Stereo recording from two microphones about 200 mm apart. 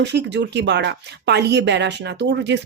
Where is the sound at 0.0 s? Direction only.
60° right (ahead or behind).